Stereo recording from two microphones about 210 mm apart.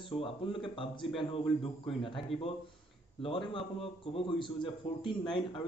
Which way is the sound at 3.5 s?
25° left (ahead or behind).